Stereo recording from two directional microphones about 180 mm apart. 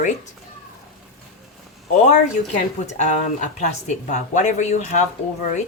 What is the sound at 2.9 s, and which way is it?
Speech, 40° left (ahead or behind).